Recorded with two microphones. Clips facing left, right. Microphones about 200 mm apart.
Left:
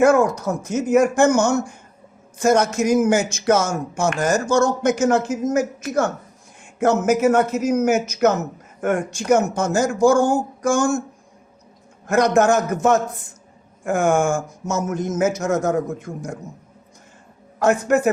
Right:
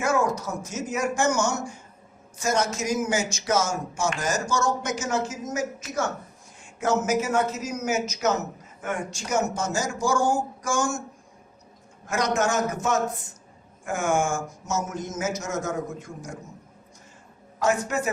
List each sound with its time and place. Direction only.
0.0 s a man's voice: 55° left (ahead or behind)
12.0 s a man's voice: 55° left (ahead or behind)
17.6 s a man's voice: 60° left (ahead or behind)